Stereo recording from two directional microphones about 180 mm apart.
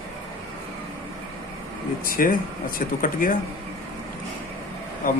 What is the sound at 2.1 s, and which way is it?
Speech, 50° left (ahead or behind).